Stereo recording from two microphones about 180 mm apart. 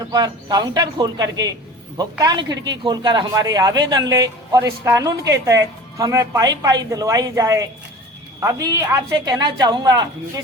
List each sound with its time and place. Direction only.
0.1 s speech: 25° right (ahead or behind)